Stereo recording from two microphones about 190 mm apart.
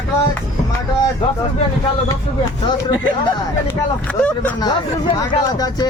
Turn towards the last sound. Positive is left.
turn(degrees=25)  # may be behind; listen again after turning